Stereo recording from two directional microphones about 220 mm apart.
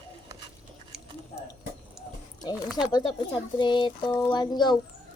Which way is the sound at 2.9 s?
20° left (ahead or behind).